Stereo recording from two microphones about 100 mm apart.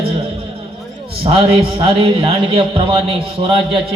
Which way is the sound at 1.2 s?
80° right.